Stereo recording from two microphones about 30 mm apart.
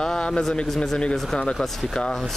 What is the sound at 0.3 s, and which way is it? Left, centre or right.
Speech, centre.